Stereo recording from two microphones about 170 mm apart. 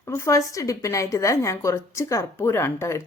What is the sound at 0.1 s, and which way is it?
A woman's voice, 20° left (ahead or behind).